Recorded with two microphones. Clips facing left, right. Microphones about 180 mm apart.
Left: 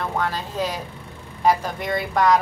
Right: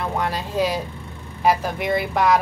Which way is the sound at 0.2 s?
15° right (ahead or behind).